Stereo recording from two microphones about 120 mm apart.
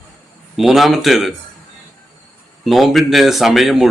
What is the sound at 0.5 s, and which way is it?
Speech, 5° right (ahead or behind).